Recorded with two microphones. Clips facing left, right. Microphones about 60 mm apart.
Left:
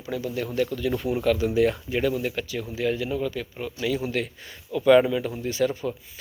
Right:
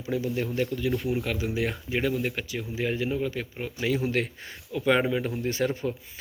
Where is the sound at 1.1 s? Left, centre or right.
Centre; by 4.3 s right.